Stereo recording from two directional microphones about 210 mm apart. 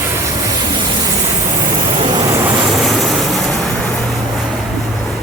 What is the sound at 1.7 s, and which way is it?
Vehicle, 25° right (ahead or behind).